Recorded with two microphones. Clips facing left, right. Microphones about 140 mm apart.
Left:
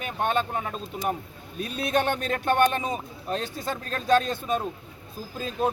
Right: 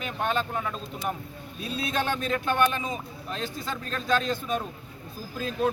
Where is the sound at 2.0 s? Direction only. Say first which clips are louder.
Left 2 dB; 60° left (ahead or behind).